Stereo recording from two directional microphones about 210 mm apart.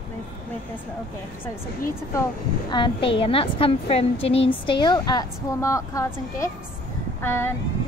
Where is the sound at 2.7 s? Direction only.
25° left (ahead or behind).